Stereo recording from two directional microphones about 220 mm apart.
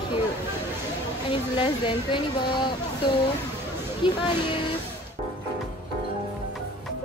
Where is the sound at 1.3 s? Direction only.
20° left (ahead or behind).